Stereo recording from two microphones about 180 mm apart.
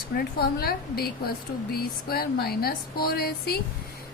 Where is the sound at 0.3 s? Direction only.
60° left (ahead or behind).